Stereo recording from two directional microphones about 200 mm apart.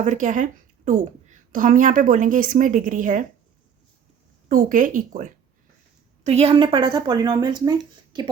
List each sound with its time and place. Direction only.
0.0 s a woman's voice: 40° right (ahead or behind)
4.4 s a woman's voice: 40° right (ahead or behind)
6.2 s speech: 30° right (ahead or behind)